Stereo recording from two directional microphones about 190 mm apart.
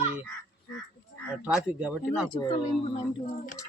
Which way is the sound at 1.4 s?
5° right (ahead or behind).